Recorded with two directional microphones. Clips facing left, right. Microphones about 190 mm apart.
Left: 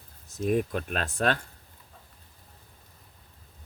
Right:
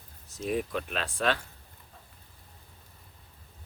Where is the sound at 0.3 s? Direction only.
50° left (ahead or behind).